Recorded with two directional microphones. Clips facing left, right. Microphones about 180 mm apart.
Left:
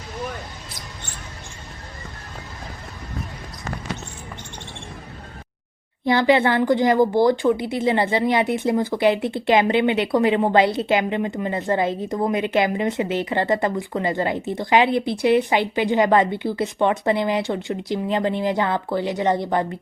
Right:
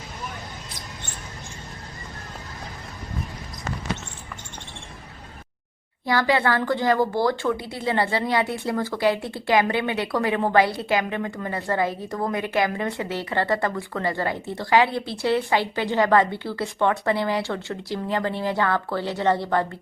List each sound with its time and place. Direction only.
6.1 s speech: 20° left (ahead or behind)